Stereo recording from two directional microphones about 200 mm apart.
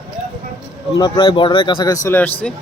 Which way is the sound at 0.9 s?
20° left (ahead or behind).